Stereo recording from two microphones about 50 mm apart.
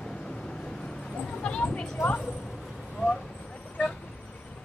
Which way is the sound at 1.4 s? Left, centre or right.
Left.